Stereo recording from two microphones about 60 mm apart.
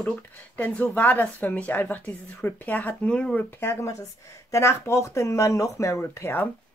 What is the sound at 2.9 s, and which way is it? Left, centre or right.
Speech, centre.